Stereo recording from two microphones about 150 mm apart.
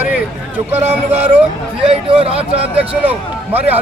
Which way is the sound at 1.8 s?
40° right (ahead or behind).